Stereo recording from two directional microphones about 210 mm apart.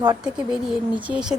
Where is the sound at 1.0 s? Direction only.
5° right (ahead or behind).